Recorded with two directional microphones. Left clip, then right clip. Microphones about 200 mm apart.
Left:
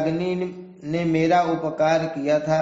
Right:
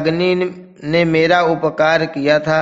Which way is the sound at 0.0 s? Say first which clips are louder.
Right 8 dB; 45° right (ahead or behind).